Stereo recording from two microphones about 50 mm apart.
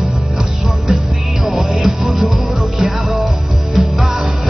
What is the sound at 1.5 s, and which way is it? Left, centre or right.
Music, centre.